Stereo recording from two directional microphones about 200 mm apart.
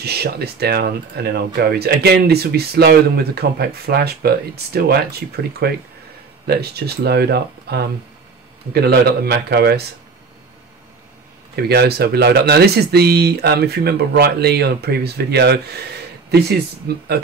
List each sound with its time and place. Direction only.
0.0 s a man's voice: 50° right (ahead or behind)
11.5 s speech: 55° right (ahead or behind)